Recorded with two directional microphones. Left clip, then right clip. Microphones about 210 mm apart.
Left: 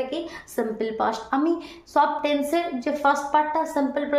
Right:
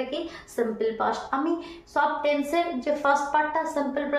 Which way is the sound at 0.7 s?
50° left (ahead or behind).